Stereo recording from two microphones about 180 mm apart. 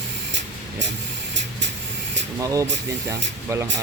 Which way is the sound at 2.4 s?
20° right (ahead or behind).